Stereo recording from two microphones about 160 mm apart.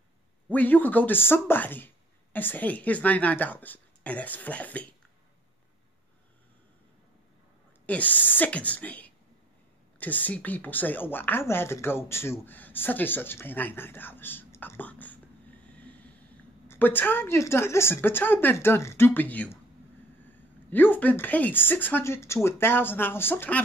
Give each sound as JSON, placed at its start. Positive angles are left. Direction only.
{"t": 0.5, "sound": "a woman's voice", "side_deg": 10}
{"t": 7.8, "sound": "a woman's voice", "side_deg": 10}
{"t": 16.6, "sound": "a woman's voice", "side_deg": 10}
{"t": 20.7, "sound": "a woman's voice", "side_deg": 10}